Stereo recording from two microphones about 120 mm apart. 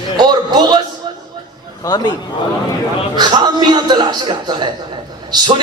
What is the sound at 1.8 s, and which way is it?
Speech, 35° left (ahead or behind).